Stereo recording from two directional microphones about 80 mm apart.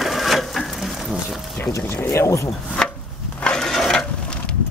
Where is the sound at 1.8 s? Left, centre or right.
Left.